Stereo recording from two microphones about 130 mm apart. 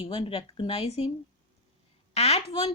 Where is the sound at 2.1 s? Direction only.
50° left (ahead or behind).